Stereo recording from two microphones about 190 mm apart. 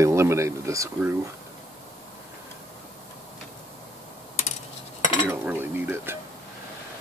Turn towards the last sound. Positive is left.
turn(degrees=-10)  # may be behind; listen again after turning